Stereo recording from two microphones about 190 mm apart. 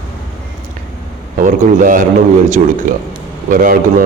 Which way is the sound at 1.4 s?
45° right (ahead or behind).